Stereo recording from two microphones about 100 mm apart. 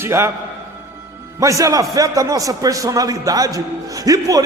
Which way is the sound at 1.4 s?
30° right (ahead or behind).